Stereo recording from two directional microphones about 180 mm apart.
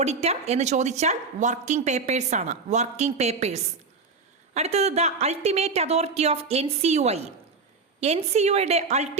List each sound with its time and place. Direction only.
0.0 s speech: 35° right (ahead or behind)